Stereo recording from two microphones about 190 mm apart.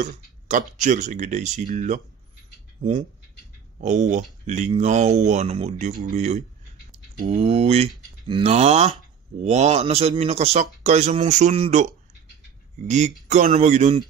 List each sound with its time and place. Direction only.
0.0 s speech: 45° right (ahead or behind)
12.8 s speech: 40° right (ahead or behind)